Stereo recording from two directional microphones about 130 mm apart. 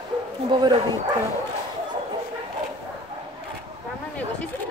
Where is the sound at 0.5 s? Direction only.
35° right (ahead or behind).